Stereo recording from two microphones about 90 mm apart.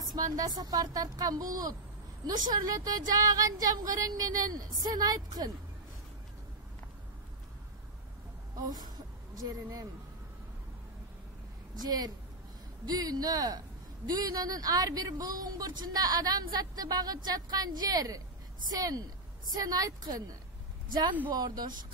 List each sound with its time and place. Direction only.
0.1 s speech: 45° right (ahead or behind)
8.5 s a woman's voice: 45° right (ahead or behind)
11.7 s speech: 50° right (ahead or behind)
21.3 s speech: 50° right (ahead or behind)